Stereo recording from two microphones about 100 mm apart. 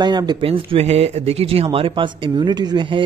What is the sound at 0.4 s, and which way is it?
Speech, 70° right (ahead or behind).